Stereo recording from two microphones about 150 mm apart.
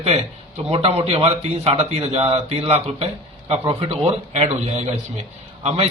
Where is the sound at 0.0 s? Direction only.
45° right (ahead or behind).